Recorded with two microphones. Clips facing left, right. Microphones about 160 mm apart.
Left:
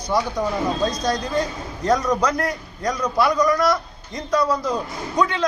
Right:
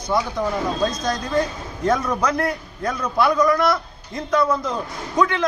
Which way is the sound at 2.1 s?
10° left (ahead or behind).